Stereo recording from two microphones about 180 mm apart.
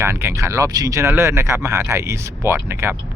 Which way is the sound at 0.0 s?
15° right (ahead or behind).